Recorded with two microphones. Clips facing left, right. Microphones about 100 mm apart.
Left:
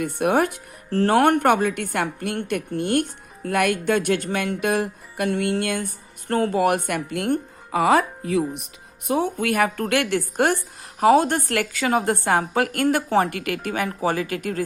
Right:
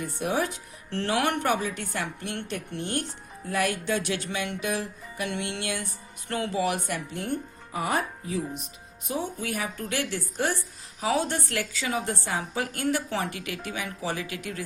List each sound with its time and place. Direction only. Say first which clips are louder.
0.0 s a woman's voice: left 8 dB; 60° left (ahead or behind)